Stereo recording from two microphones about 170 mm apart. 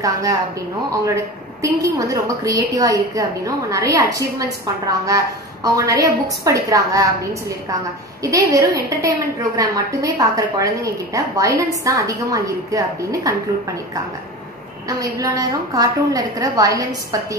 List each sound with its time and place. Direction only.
0.0 s a woman's voice: 20° right (ahead or behind)
8.2 s a woman's voice: 20° right (ahead or behind)
14.9 s a woman's voice: 20° right (ahead or behind)